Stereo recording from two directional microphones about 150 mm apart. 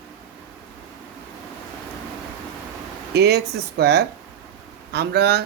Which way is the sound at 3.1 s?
90° right.